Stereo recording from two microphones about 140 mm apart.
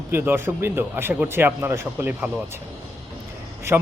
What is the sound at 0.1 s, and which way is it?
Speech, 15° right (ahead or behind).